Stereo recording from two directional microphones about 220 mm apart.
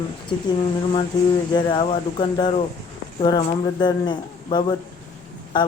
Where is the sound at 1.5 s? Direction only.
20° left (ahead or behind).